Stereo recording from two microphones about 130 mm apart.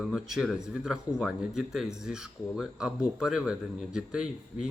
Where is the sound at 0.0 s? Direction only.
Centre (ahead or behind).